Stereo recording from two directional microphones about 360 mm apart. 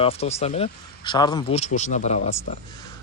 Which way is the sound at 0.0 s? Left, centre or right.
Centre.